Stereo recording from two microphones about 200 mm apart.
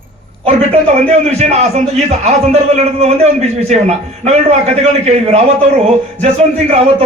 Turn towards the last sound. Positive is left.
turn(degrees=-30)  # may be behind; listen again after turning